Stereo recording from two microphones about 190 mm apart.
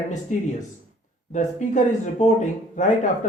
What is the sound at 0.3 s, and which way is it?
Speech, 40° left (ahead or behind).